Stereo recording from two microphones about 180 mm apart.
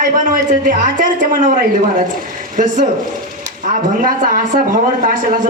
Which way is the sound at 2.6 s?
45° right (ahead or behind).